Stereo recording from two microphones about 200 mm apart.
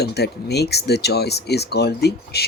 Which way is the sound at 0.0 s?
55° left (ahead or behind).